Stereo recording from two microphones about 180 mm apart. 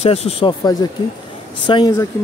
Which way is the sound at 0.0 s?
35° left (ahead or behind).